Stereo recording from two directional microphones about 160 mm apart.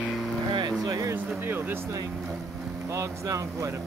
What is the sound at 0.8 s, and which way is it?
Speech, 20° right (ahead or behind).